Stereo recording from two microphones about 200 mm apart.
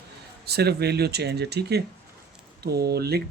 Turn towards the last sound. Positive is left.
turn(degrees=-50)  # may be behind; listen again after turning